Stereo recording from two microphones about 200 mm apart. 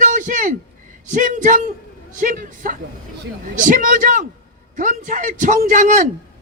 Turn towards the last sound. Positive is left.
turn(degrees=-40)  # may be behind; listen again after turning